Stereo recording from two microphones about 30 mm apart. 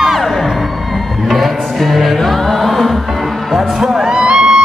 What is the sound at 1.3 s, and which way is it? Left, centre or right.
Music, centre.